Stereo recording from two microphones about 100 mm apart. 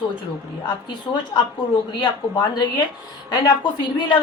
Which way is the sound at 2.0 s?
45° left (ahead or behind).